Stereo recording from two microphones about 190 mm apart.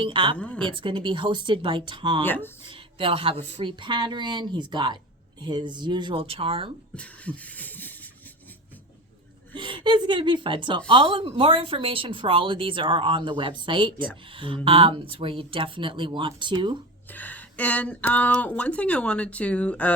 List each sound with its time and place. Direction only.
0.0 s a woman's voice: 25° right (ahead or behind)
0.3 s speech: 5° left (ahead or behind)
0.6 s a woman's voice: 25° right (ahead or behind)
2.2 s speech: 10° left (ahead or behind)
2.6 s a woman's voice: 30° right (ahead or behind)
6.9 s beatboxing: 5° left (ahead or behind)
9.6 s a woman's voice: 25° right (ahead or behind)
17.1 s speech: 10° left (ahead or behind)